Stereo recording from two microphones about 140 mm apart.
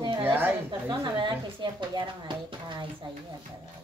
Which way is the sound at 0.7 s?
35° right (ahead or behind).